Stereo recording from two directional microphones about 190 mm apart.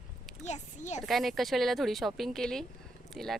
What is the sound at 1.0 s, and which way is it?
Speech, centre (ahead or behind).